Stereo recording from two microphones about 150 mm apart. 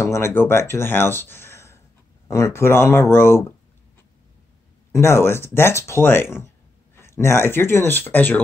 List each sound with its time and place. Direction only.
0.0 s speech: 15° left (ahead or behind)
4.9 s speech: 15° left (ahead or behind)